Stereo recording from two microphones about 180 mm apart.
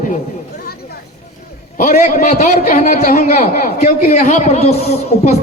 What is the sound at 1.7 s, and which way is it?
A man's voice, 40° left (ahead or behind).